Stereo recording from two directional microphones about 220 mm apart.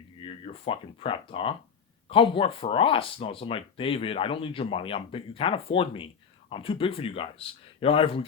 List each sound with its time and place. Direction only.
0.2 s speech: 25° left (ahead or behind)